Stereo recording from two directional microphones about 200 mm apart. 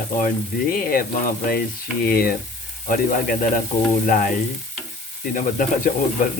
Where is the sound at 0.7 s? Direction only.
45° left (ahead or behind).